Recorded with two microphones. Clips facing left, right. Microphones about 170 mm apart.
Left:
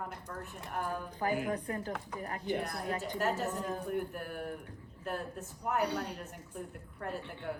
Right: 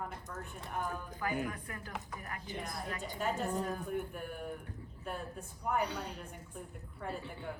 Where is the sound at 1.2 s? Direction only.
40° left (ahead or behind).